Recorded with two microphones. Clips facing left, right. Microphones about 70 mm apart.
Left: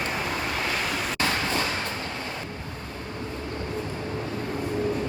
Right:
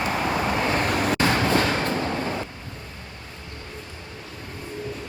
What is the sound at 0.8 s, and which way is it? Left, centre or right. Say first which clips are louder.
Vehicle: right 5 dB; right.